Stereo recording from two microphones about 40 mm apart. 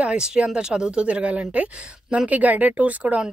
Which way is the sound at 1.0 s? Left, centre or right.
Right.